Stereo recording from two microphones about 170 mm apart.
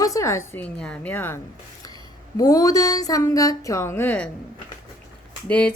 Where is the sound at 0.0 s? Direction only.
20° left (ahead or behind).